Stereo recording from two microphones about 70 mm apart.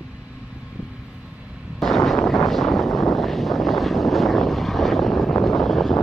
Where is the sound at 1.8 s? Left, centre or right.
Centre.